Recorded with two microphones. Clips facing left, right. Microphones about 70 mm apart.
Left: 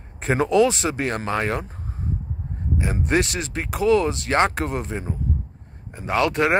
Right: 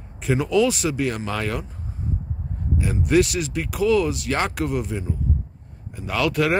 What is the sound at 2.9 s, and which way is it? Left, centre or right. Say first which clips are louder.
Speech: right 4 dB; left.